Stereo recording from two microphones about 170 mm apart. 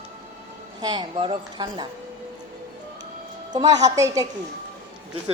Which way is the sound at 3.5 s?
25° right (ahead or behind).